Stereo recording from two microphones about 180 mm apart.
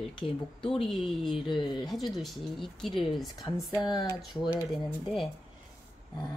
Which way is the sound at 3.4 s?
15° left (ahead or behind).